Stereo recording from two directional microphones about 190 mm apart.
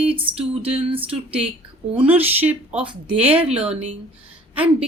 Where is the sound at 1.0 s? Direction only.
5° right (ahead or behind).